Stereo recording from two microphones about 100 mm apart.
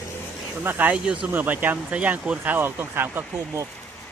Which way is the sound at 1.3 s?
20° right (ahead or behind).